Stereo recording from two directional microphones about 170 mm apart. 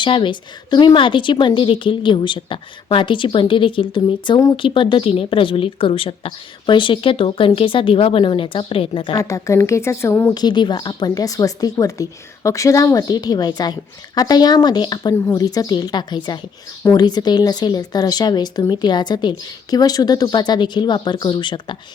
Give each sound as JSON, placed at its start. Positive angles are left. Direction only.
{"t": 0.0, "sound": "a woman's voice", "side_deg": 30}
{"t": 9.1, "sound": "a woman's voice", "side_deg": 20}